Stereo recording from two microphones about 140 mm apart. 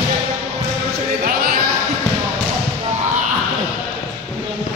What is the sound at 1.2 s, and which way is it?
Basketball bounce, 90° right.